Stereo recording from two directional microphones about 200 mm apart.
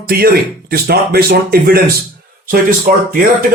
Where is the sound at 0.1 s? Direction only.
50° right (ahead or behind).